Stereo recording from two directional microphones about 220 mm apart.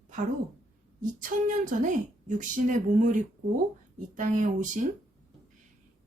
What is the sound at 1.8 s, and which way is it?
A woman's voice, 35° right (ahead or behind).